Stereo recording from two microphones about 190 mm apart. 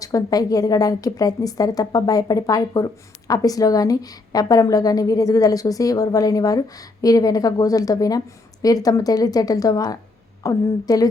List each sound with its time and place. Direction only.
0.0 s a woman's voice: 20° left (ahead or behind)